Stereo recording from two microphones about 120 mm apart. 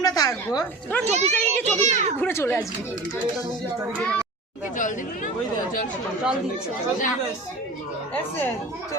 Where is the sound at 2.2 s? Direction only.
15° left (ahead or behind).